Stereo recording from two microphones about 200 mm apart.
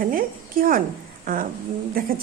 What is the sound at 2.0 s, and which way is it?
Speech, 45° right (ahead or behind).